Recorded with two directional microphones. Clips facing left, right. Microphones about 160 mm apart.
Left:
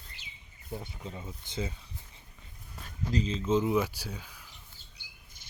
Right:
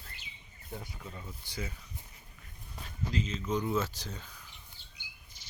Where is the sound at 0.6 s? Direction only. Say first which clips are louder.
Left 4 dB; 25° left (ahead or behind).